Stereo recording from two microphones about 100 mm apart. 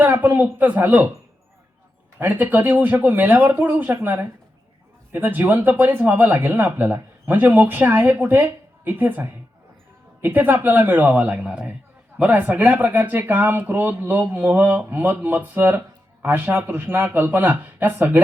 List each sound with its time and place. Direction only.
0.0 s speech: 15° right (ahead or behind)
2.1 s speech: 20° right (ahead or behind)